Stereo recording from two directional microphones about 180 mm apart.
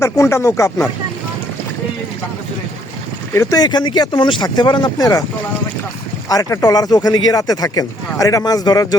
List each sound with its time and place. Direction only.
0.0 s speech: 15° left (ahead or behind)
3.3 s speech: 20° left (ahead or behind)
6.2 s speech: 20° left (ahead or behind)